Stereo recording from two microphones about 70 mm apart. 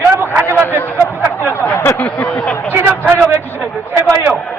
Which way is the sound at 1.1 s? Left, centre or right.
Right.